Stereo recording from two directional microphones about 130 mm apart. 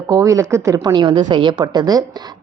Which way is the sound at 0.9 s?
35° right (ahead or behind).